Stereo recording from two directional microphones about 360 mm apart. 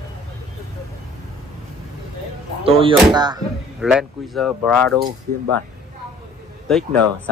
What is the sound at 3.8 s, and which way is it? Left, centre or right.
Speech, centre.